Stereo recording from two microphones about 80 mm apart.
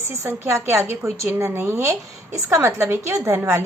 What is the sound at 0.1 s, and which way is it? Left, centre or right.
A woman's voice, right.